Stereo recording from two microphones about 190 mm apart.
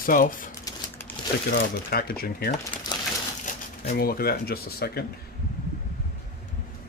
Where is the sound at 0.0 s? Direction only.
50° left (ahead or behind).